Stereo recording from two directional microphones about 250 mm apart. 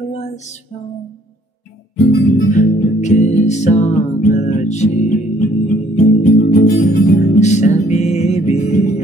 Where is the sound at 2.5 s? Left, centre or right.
Left.